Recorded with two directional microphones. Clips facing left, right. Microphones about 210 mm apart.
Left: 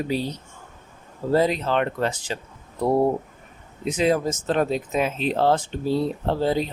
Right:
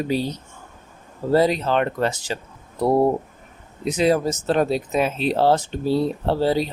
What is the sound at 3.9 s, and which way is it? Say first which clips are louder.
Speech: right 2 dB; 40° right (ahead or behind).